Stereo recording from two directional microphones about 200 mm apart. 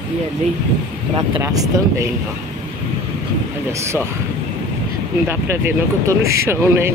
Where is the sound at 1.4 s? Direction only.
20° right (ahead or behind).